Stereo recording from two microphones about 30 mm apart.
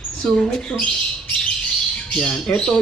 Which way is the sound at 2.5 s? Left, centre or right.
Left.